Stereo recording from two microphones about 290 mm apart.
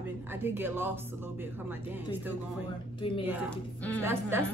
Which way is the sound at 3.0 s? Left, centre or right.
Centre.